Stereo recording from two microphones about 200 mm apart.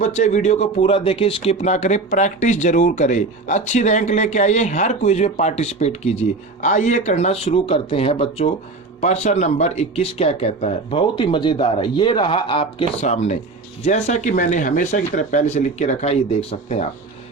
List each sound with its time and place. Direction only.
0.0 s speech: 35° left (ahead or behind)